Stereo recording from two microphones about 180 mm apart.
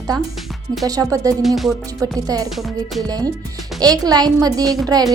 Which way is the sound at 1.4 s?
Centre (ahead or behind).